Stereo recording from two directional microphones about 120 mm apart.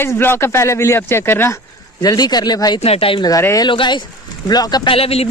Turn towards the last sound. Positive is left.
turn(degrees=55)  # may be behind; listen again after turning